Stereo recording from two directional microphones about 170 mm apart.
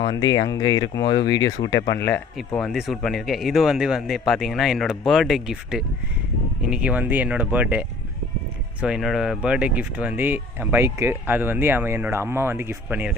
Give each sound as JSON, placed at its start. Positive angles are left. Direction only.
{"t": 0.0, "sound": "speech", "side_deg": 25}
{"t": 2.6, "sound": "speech", "side_deg": 0}